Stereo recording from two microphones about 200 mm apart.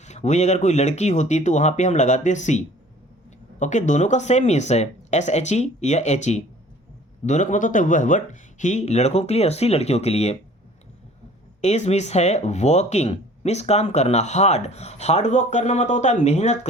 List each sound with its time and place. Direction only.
0.0 s speech: 35° left (ahead or behind)
11.6 s speech: 35° left (ahead or behind)